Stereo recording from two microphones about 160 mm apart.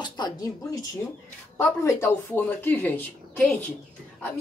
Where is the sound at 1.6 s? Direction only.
15° left (ahead or behind).